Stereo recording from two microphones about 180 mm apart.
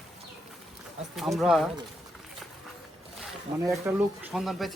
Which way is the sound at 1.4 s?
Centre (ahead or behind).